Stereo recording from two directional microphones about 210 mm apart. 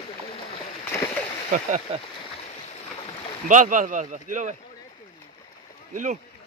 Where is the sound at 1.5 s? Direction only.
35° right (ahead or behind).